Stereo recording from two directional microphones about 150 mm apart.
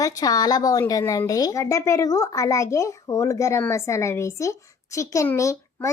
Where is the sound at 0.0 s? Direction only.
25° left (ahead or behind).